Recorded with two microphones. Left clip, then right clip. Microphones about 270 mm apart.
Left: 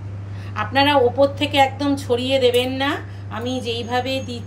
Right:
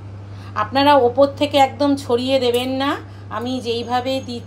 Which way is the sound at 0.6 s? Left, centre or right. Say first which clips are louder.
Right 2 dB; right.